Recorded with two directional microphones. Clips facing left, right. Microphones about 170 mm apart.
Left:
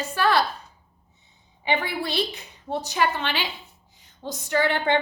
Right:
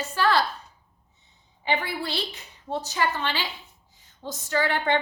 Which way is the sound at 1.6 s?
15° left (ahead or behind).